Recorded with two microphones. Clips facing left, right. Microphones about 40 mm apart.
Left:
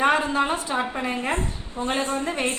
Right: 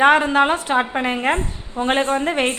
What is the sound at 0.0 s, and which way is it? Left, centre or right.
A woman's voice, right.